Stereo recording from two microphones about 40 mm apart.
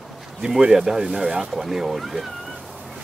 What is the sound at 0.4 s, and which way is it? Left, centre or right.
Speech, centre.